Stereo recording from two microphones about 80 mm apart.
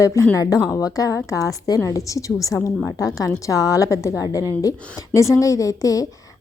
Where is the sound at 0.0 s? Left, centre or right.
Left.